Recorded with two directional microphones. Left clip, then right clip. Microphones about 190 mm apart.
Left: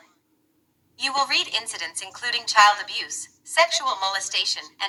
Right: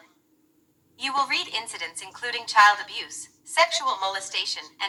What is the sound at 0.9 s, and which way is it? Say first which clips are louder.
A woman's voice: left 2 dB; 30° left (ahead or behind).